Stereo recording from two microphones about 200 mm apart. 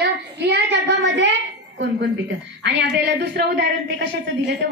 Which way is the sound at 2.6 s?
60° right (ahead or behind).